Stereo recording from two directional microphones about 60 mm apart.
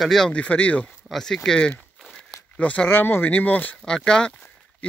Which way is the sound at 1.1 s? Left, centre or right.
Centre.